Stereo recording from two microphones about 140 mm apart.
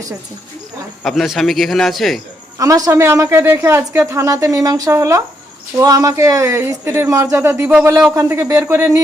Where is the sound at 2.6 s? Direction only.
25° right (ahead or behind).